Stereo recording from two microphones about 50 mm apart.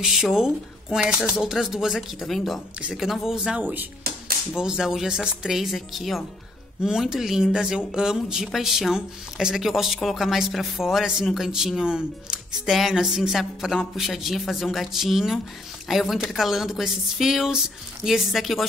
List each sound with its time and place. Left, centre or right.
0.0 s speech: centre
6.8 s speech: centre